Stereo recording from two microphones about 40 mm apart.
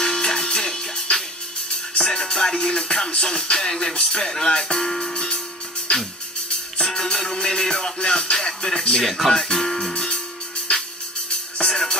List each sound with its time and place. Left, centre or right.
0.0 s music: centre
6.8 s music: centre
9.0 s speech: centre
9.9 s music: centre